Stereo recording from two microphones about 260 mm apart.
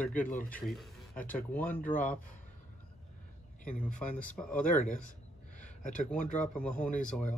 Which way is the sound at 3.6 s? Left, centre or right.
Left.